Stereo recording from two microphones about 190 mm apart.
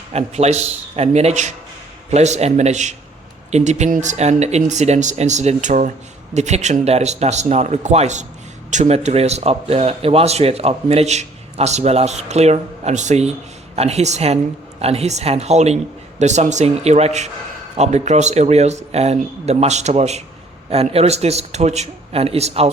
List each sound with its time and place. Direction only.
0.1 s speech: 35° right (ahead or behind)